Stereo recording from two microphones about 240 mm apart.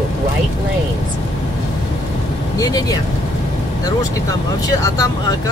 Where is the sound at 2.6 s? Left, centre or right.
Centre.